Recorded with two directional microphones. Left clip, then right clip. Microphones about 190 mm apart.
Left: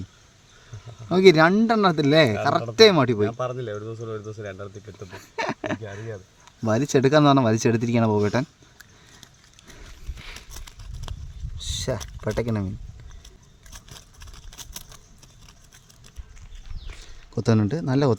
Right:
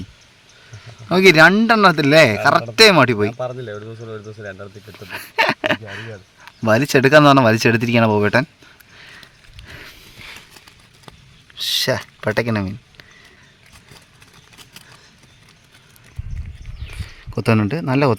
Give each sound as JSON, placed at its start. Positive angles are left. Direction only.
{"t": 1.1, "sound": "speech", "side_deg": 0}
{"t": 9.0, "sound": "sniff", "side_deg": 0}
{"t": 10.5, "sound": "clip-clop", "side_deg": 30}
{"t": 11.5, "sound": "speech", "side_deg": 0}
{"t": 17.3, "sound": "speech", "side_deg": 5}